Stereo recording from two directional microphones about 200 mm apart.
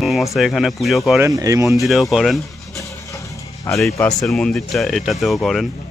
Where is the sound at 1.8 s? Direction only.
Centre (ahead or behind).